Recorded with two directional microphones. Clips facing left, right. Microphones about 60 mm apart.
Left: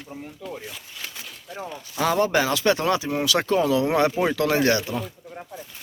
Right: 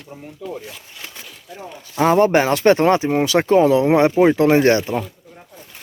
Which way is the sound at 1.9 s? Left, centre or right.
Right.